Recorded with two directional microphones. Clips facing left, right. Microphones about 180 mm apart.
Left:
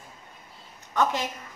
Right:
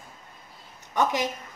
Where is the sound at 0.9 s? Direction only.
15° right (ahead or behind).